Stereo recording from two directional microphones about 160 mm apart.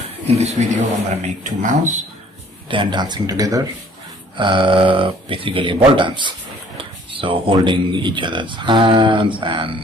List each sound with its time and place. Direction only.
0.4 s speech: 40° right (ahead or behind)
2.7 s speech: 30° right (ahead or behind)